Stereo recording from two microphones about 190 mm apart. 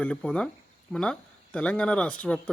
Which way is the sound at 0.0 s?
5° left (ahead or behind).